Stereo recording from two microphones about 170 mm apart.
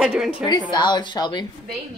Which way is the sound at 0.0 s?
Centre (ahead or behind).